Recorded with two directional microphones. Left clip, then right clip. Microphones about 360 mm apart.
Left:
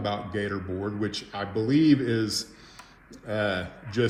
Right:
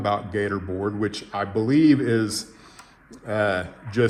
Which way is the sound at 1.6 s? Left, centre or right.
Centre.